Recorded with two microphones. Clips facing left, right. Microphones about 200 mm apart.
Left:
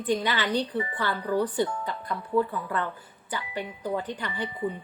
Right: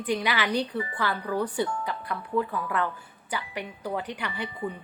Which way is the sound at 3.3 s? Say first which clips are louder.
Even; 10° right (ahead or behind).